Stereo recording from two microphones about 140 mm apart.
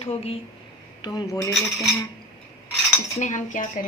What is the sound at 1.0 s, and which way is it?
Speech, 30° left (ahead or behind).